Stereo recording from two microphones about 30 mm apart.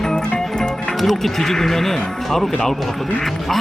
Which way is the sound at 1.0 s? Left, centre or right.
Centre.